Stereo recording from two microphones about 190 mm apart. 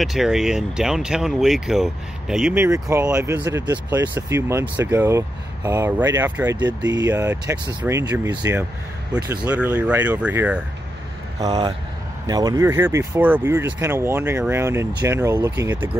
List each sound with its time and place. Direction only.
0.0 s speech: centre (ahead or behind)
9.5 s speech: 10° right (ahead or behind)
11.3 s speech: 20° right (ahead or behind)